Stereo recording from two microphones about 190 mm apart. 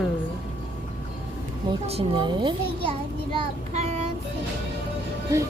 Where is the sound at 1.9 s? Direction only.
25° right (ahead or behind).